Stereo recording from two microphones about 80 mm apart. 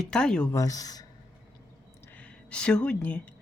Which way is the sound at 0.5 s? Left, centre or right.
Left.